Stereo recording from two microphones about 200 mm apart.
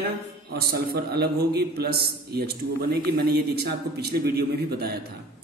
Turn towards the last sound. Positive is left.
turn(degrees=-50)  # may be behind; listen again after turning